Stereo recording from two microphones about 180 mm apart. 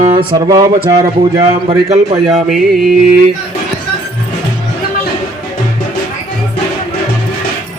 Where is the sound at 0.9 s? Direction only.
25° right (ahead or behind).